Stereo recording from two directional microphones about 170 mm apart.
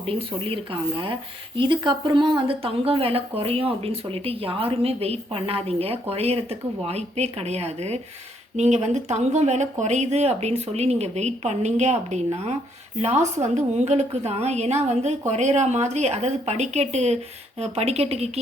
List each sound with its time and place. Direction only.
0.0 s speech: 35° right (ahead or behind)